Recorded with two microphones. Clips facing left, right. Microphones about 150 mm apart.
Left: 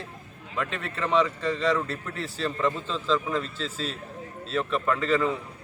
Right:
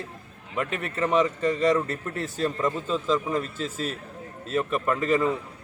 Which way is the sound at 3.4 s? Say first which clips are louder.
Right 2 dB; 45° right (ahead or behind).